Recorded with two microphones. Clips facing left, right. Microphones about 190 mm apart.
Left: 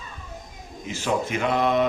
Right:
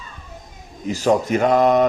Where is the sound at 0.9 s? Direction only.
40° right (ahead or behind).